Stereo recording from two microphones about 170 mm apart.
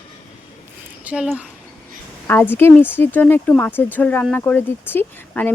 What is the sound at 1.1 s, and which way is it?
Speech, 5° right (ahead or behind).